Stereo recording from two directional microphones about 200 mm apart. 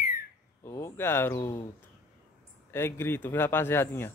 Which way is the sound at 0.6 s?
15° left (ahead or behind).